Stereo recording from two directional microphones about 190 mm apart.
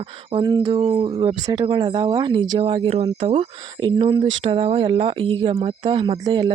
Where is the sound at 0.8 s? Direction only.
30° right (ahead or behind).